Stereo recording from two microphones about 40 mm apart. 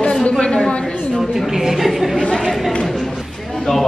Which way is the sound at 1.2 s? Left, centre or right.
Centre.